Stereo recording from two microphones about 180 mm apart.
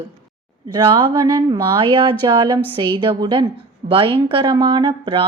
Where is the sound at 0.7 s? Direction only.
25° right (ahead or behind).